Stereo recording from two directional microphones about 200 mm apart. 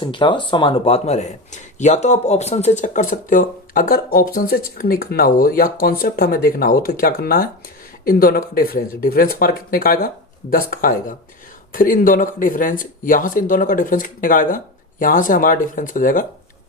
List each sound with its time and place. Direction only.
0.0 s speech: 25° left (ahead or behind); by 16.2 s 40° left (ahead or behind)